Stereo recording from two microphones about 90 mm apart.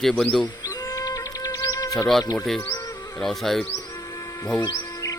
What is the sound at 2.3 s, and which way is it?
Speech, 5° left (ahead or behind).